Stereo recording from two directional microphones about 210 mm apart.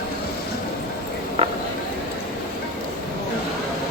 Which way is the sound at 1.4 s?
30° right (ahead or behind).